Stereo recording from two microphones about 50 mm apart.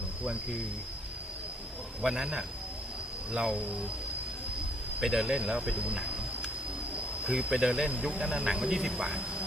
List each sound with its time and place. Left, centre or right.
2.0 s speech: centre
4.9 s speech: centre